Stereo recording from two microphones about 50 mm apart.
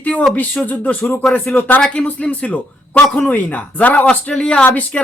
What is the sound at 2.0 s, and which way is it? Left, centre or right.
Speech, left.